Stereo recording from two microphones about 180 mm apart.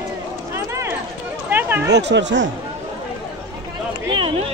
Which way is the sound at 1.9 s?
70° right (ahead or behind).